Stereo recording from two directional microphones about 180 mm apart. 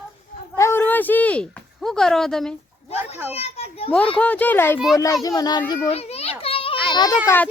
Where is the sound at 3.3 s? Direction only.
35° left (ahead or behind).